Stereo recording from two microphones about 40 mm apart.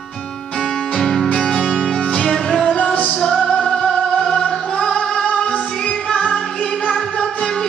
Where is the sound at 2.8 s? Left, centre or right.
Left.